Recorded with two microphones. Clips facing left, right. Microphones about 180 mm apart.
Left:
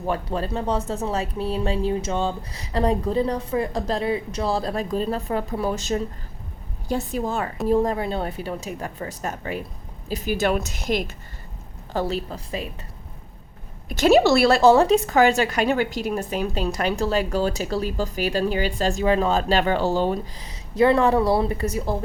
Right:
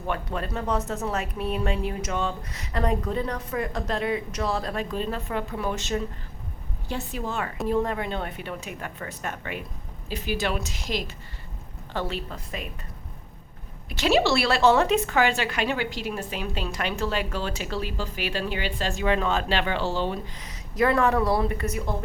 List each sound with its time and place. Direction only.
0.1 s a woman's voice: 30° left (ahead or behind); by 11.0 s 50° left (ahead or behind)
11.9 s speech: 35° left (ahead or behind)
13.9 s a woman's voice: 45° left (ahead or behind)
20.4 s speech: 30° left (ahead or behind)